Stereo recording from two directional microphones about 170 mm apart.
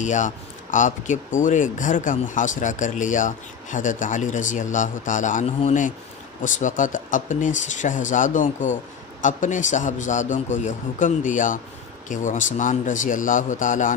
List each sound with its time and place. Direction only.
0.0 s speech: 45° left (ahead or behind)